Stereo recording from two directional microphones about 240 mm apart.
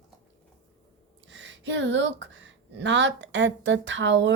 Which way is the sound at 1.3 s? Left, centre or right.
Right.